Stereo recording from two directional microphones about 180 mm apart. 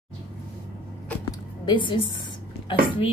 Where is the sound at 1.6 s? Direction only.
25° left (ahead or behind).